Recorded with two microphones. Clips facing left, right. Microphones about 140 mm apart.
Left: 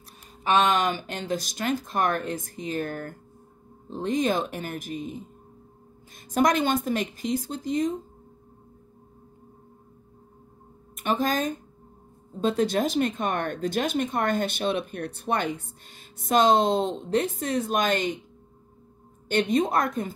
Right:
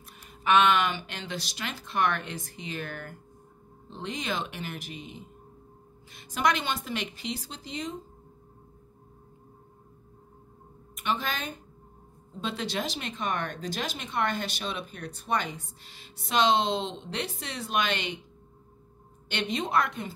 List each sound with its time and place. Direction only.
0.4 s speech: 35° left (ahead or behind)
11.0 s a woman's voice: 45° left (ahead or behind)
19.2 s speech: 45° left (ahead or behind)